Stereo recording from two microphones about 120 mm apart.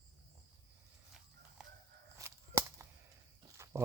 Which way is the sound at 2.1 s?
25° right (ahead or behind).